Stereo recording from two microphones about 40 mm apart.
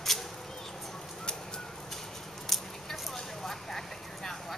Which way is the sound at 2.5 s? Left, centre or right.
Centre.